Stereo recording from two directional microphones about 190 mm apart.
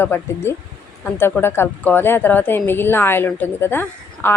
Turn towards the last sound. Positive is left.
turn(degrees=10)  # may be behind; listen again after turning